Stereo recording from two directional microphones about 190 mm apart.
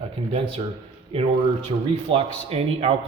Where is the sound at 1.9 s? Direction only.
30° right (ahead or behind).